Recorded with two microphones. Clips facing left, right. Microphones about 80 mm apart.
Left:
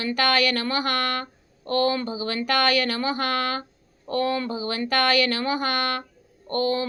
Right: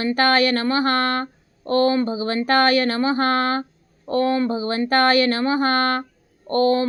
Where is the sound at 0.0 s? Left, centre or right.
Right.